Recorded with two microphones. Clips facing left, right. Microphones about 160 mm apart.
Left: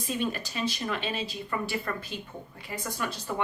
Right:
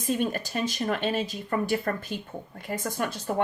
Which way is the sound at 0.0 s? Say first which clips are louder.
Right 4 dB; 50° right (ahead or behind).